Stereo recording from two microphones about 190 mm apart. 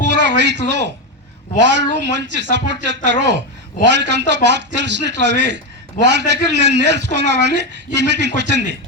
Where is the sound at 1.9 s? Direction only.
65° right (ahead or behind).